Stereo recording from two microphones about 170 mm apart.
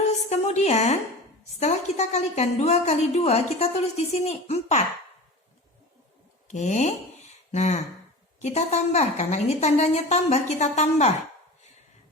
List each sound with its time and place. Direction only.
0.3 s a woman's voice: 40° left (ahead or behind)
6.5 s a woman's voice: 45° left (ahead or behind)